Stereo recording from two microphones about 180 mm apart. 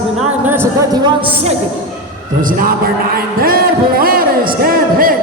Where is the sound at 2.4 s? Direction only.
50° right (ahead or behind).